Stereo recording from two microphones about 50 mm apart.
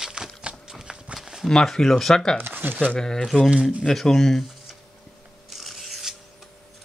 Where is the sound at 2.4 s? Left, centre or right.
Right.